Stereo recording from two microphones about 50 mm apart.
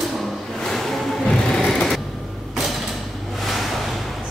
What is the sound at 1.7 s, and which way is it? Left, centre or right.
Vehicle, centre.